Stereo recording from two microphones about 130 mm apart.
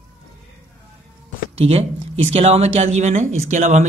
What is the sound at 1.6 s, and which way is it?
Speech, 50° right (ahead or behind).